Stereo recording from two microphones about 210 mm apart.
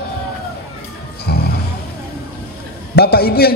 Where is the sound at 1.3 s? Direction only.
50° left (ahead or behind).